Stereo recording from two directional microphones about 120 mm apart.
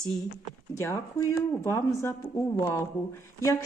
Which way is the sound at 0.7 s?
25° left (ahead or behind).